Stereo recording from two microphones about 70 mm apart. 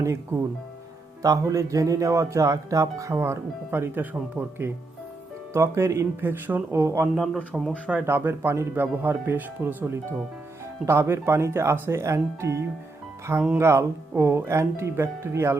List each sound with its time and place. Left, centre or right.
0.0 s speech: right
1.2 s speech: right
5.5 s speech: right
7.5 s speech: centre
8.0 s speech: right